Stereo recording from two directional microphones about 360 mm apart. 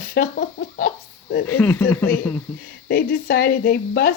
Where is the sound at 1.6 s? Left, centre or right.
Centre.